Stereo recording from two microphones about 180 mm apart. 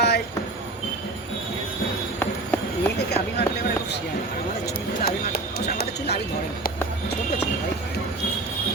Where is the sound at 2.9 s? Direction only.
65° left (ahead or behind).